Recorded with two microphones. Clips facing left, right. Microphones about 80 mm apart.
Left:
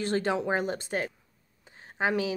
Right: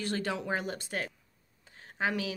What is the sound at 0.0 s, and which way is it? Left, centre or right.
A woman's voice, left.